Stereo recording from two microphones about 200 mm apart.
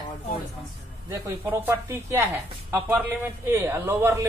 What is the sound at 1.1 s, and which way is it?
A woman's voice, 15° right (ahead or behind).